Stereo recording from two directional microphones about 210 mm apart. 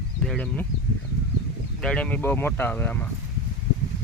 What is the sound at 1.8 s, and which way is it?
Speech, 5° left (ahead or behind).